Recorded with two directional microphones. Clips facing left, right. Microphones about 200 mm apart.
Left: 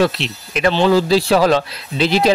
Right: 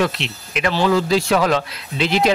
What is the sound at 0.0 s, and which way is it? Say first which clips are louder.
Speech: left 4 dB; 35° left (ahead or behind).